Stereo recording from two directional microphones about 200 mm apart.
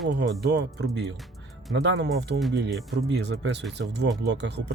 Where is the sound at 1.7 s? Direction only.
60° right (ahead or behind).